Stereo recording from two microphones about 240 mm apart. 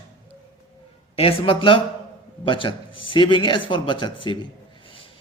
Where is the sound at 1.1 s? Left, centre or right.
Left.